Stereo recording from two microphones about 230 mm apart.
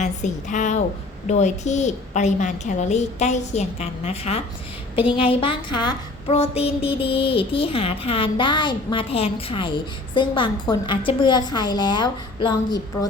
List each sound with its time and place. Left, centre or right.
0.0 s a woman's voice: left